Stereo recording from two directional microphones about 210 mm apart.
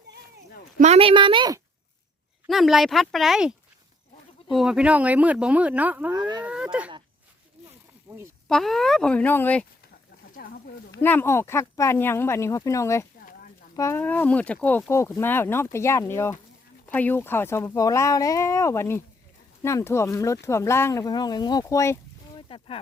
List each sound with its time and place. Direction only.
0.8 s a woman's voice: 30° right (ahead or behind)
2.5 s speech: centre (ahead or behind)
4.5 s speech: 5° right (ahead or behind)
6.1 s a woman's voice: 20° right (ahead or behind)
6.4 s speech: 5° right (ahead or behind)
8.1 s a sound: 15° right (ahead or behind)
8.4 s speech: centre (ahead or behind)
10.3 s a sound: 45° left (ahead or behind)
11.0 s speech: 10° left (ahead or behind)
13.1 s a sound: 40° left (ahead or behind)
13.7 s speech: 10° left (ahead or behind)
22.4 s a sound: 25° left (ahead or behind)